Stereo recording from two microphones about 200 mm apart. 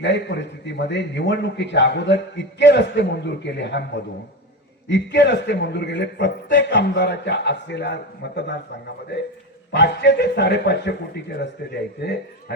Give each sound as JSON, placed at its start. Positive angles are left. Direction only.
{"t": 0.0, "sound": "a man's voice", "side_deg": 60}
{"t": 4.9, "sound": "a man's voice", "side_deg": 60}
{"t": 9.7, "sound": "a man's voice", "side_deg": 55}